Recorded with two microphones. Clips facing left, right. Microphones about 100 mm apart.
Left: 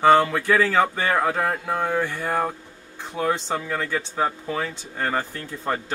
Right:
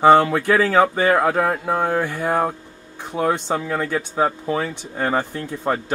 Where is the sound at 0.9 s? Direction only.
15° right (ahead or behind).